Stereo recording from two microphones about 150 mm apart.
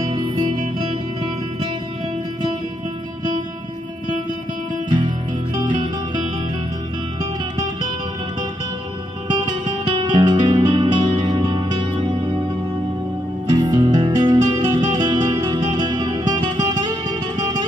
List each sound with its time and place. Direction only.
0.1 s music: 30° right (ahead or behind)
4.8 s music: 30° right (ahead or behind)
9.3 s music: 30° right (ahead or behind)
13.5 s music: 25° right (ahead or behind)